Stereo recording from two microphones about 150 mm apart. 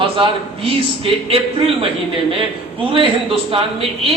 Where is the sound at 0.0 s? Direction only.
40° right (ahead or behind).